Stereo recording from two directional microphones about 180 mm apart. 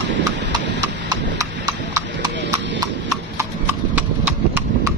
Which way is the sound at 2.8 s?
15° right (ahead or behind).